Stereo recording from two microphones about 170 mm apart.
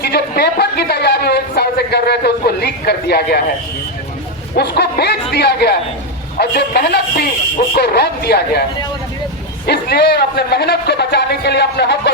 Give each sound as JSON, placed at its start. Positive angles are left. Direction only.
{"t": 0.0, "sound": "speech", "side_deg": 70}
{"t": 4.5, "sound": "speech", "side_deg": 70}
{"t": 9.6, "sound": "speech", "side_deg": 70}